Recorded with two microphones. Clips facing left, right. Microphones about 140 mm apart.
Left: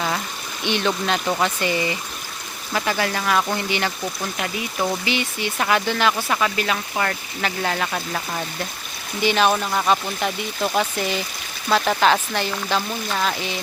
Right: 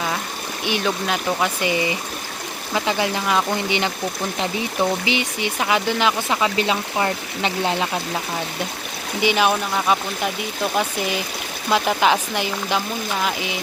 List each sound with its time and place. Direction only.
0.6 s speech: 10° right (ahead or behind)
5.0 s speech: 15° right (ahead or behind)
9.2 s speech: 10° right (ahead or behind)